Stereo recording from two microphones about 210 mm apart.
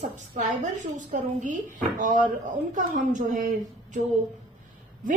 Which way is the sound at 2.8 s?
35° right (ahead or behind).